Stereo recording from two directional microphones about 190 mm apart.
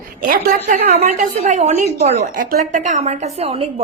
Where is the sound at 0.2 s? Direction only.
45° right (ahead or behind).